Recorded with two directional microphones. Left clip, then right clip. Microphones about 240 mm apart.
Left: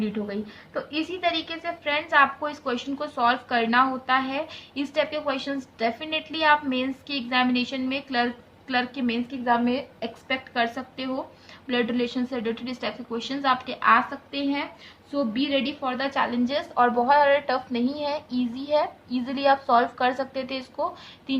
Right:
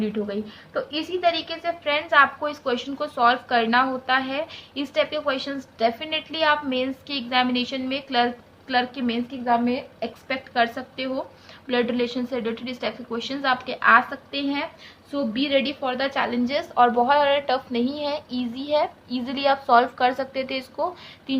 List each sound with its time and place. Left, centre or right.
0.0 s a woman's voice: centre